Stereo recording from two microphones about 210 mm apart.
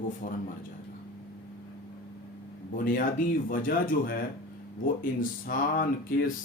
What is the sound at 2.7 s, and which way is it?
Speech, 40° left (ahead or behind).